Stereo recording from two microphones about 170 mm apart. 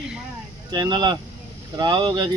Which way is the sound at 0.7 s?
25° right (ahead or behind).